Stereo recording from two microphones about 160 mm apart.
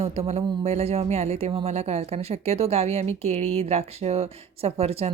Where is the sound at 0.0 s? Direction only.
40° right (ahead or behind).